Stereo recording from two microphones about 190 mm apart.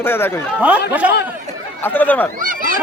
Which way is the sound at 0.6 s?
5° right (ahead or behind).